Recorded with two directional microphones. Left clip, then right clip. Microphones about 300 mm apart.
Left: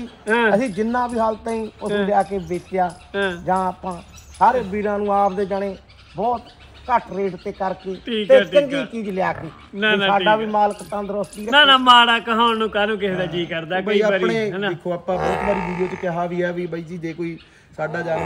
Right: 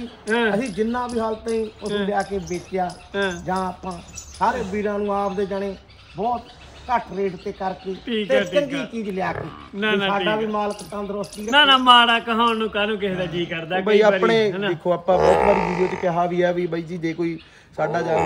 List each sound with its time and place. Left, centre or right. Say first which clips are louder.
0.3 s speech: left 4 dB; centre
14.2 s a man's voice: right 3 dB; centre
14.5 s speech: right 2 dB; centre
15.1 s speech: right 5 dB; right
16.1 s a man's voice: right 4 dB; centre